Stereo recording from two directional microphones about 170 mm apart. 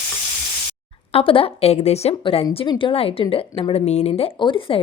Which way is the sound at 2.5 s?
25° left (ahead or behind).